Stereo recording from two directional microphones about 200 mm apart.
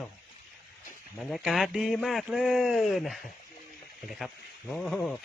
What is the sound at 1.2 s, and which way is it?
Speech, centre (ahead or behind).